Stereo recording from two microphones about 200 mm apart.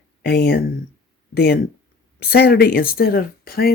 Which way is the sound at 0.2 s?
50° left (ahead or behind).